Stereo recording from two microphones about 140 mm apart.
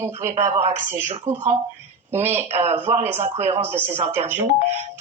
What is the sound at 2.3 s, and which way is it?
Speech, 50° right (ahead or behind).